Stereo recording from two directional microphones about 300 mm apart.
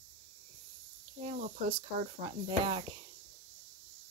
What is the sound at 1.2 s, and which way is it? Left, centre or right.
A woman's voice, right.